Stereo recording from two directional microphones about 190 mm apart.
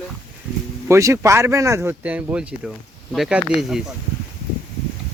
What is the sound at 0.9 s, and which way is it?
Speech, 15° right (ahead or behind).